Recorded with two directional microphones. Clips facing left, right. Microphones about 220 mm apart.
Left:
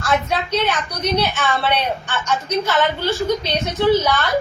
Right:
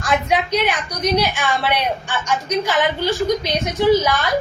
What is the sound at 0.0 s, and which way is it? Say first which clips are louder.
A woman's voice: right 1 dB; 15° right (ahead or behind).